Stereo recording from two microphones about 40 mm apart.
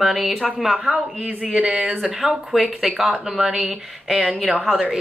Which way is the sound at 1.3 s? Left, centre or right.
Right.